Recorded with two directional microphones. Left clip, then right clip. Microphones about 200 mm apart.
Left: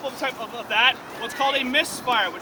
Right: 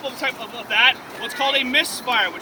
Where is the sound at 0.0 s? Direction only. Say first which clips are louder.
Right 2 dB; 5° left (ahead or behind).